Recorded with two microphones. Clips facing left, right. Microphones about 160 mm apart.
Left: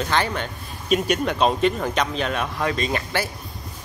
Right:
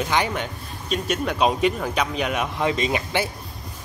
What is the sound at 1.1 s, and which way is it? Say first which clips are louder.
Speech: left 1 dB; 5° right (ahead or behind).